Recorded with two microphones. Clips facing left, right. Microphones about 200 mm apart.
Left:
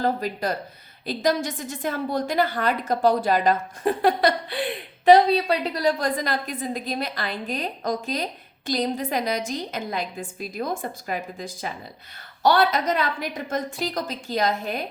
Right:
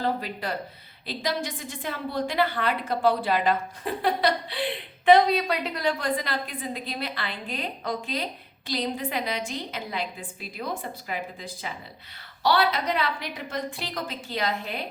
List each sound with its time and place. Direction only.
0.0 s a woman's voice: 40° left (ahead or behind)
5.0 s a woman's voice: 35° left (ahead or behind)